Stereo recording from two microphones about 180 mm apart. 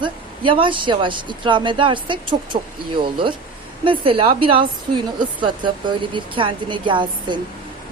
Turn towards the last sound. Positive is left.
turn(degrees=-25)  # may be behind; listen again after turning